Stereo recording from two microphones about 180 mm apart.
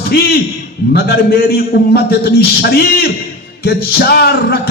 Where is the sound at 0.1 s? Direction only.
60° left (ahead or behind).